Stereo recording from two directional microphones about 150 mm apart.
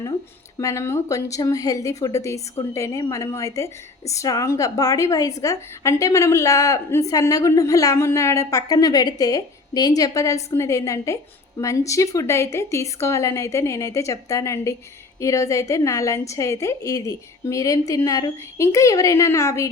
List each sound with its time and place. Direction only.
0.5 s a woman's voice: 20° left (ahead or behind)